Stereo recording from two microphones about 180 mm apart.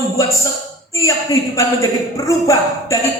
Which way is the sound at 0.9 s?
15° left (ahead or behind).